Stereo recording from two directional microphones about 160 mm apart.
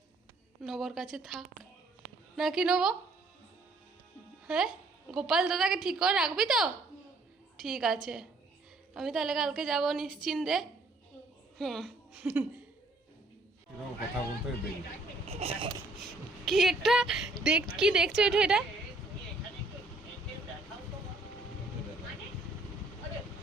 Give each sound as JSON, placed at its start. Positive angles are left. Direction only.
{"t": 0.6, "sound": "a woman's voice", "side_deg": 0}
{"t": 4.4, "sound": "a woman's voice", "side_deg": -5}
{"t": 15.3, "sound": "speech", "side_deg": -40}
{"t": 16.5, "sound": "a woman's voice", "side_deg": 0}